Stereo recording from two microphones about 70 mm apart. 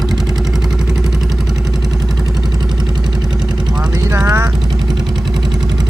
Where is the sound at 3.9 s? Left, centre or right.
Right.